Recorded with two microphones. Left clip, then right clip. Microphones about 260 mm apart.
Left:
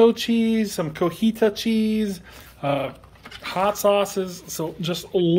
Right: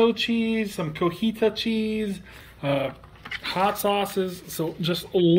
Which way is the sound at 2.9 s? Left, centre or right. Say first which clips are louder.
Right 4 dB; left.